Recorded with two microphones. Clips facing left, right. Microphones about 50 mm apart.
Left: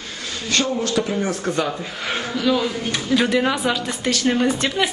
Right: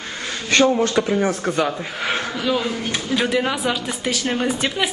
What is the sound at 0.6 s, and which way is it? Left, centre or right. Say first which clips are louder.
Speech: right 5 dB; centre.